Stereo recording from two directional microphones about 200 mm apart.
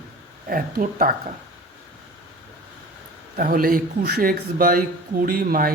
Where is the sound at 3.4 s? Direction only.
45° right (ahead or behind).